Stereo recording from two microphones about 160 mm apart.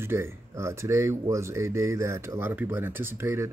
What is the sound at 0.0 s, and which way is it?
Speech, 15° right (ahead or behind).